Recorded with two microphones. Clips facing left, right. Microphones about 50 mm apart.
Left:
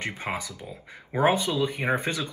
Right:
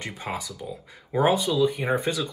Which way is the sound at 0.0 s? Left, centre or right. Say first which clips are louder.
Left 1 dB; left.